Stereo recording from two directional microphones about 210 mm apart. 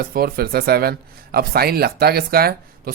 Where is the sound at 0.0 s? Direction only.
45° right (ahead or behind).